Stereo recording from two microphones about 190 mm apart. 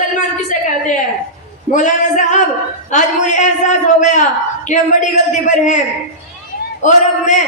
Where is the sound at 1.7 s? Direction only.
40° left (ahead or behind).